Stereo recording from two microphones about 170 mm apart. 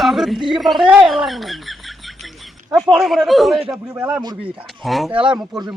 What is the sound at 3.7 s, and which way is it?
Speech, 15° right (ahead or behind).